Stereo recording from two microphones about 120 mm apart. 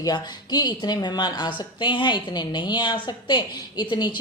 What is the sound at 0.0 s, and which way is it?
Speech, 35° left (ahead or behind).